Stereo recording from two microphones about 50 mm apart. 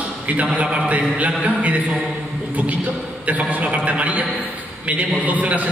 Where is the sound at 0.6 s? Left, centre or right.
Right.